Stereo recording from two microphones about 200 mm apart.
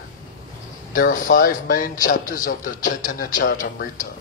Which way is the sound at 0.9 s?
45° left (ahead or behind).